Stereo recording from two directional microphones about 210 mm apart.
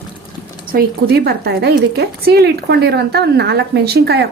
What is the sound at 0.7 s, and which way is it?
Speech, 45° right (ahead or behind).